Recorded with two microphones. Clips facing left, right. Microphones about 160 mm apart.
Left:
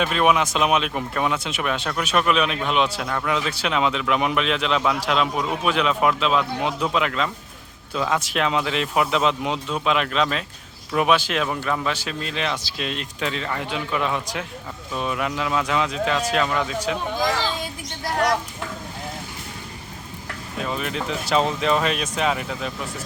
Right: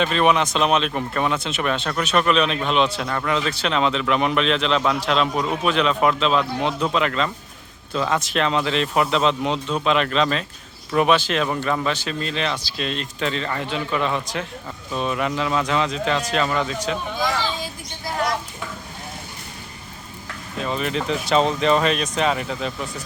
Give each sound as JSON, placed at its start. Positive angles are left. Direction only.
{"t": 0.0, "sound": "speech", "side_deg": 5}
{"t": 18.0, "sound": "a sound", "side_deg": 70}
{"t": 20.6, "sound": "speech", "side_deg": 0}